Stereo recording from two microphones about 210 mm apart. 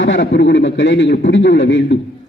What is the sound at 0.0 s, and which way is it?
A man's voice, 60° left (ahead or behind).